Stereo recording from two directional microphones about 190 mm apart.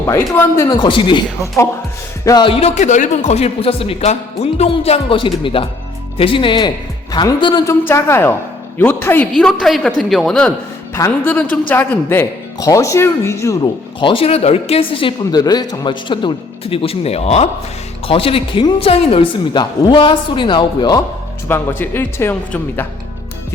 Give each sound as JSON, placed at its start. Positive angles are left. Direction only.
{"t": 0.3, "sound": "a man's voice", "side_deg": 15}
{"t": 10.9, "sound": "speech", "side_deg": 15}
{"t": 14.0, "sound": "speech", "side_deg": 30}
{"t": 21.4, "sound": "speech", "side_deg": 10}